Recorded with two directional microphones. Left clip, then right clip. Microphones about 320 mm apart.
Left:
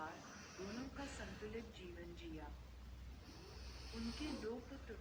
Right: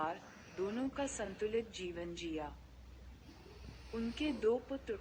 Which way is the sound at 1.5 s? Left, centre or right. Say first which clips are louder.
Right 13 dB; right.